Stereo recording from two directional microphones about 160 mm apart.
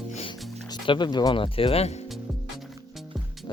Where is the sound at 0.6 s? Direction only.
30° left (ahead or behind).